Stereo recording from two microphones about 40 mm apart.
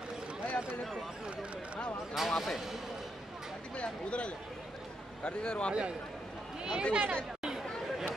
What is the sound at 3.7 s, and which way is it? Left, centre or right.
Speech, left.